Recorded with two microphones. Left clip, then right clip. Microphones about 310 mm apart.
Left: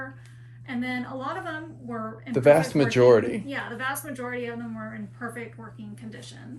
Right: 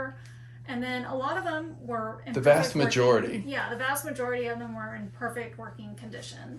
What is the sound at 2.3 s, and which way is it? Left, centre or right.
Speech, left.